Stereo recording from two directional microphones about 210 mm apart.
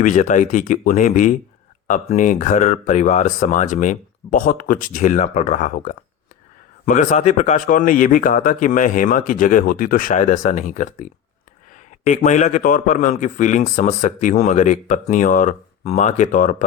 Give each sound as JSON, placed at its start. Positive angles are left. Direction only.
{"t": 0.0, "sound": "a man's voice", "side_deg": 35}